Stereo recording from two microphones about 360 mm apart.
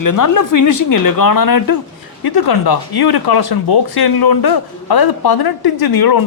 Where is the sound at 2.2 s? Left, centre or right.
Left.